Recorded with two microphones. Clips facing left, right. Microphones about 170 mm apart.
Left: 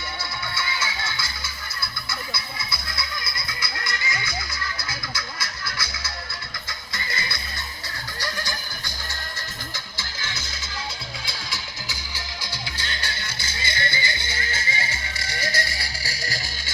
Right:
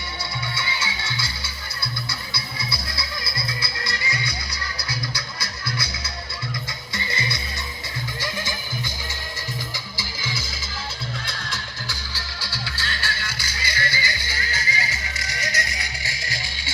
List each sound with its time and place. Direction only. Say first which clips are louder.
0.5 s music: even; 25° right (ahead or behind)
2.6 s music: right 2 dB; 25° right (ahead or behind)
6.9 s music: right 3 dB; 25° right (ahead or behind)
9.7 s music: right 3 dB; 10° right (ahead or behind)
11.3 s music: right 2 dB; 5° left (ahead or behind); by 16.6 s 40° left (ahead or behind)